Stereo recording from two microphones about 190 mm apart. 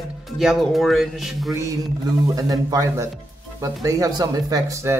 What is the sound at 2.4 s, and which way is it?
Speech, 20° right (ahead or behind).